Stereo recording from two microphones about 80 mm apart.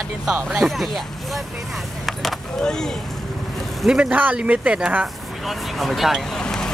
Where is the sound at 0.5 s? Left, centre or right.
Centre.